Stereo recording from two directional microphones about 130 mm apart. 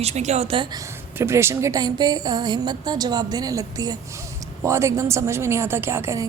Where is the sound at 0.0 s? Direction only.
55° right (ahead or behind).